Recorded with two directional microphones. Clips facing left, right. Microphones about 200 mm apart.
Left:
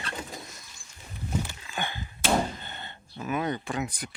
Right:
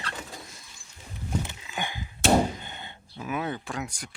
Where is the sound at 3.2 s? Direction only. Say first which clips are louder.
Left 2 dB; centre (ahead or behind).